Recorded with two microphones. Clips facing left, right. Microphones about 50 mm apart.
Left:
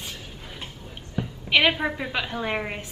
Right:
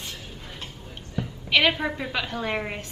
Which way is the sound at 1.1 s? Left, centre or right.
Centre.